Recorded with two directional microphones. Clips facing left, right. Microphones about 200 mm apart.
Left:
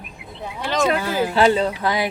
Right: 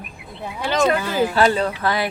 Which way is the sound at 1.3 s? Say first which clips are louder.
Left 1 dB; 20° left (ahead or behind).